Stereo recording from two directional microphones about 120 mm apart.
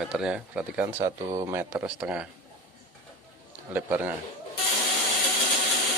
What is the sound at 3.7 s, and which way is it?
Speech, 15° right (ahead or behind).